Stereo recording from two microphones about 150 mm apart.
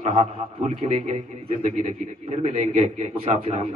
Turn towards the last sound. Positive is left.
turn(degrees=-45)  # may be behind; listen again after turning